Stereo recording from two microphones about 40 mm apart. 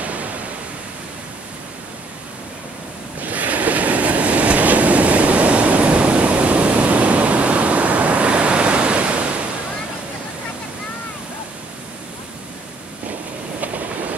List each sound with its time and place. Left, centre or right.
0.0 s pink noise: right
3.2 s train: right